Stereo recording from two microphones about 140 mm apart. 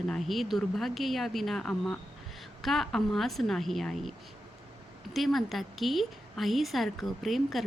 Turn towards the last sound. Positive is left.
turn(degrees=0)  # may be behind; listen again after turning